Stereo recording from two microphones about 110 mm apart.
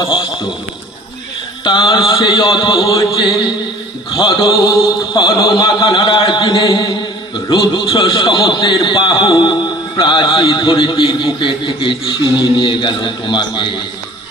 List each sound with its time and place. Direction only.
1.6 s mantra: 45° left (ahead or behind)
3.2 s mantra: 35° left (ahead or behind)
10.4 s mantra: 35° left (ahead or behind)
10.7 s mantra: 50° left (ahead or behind)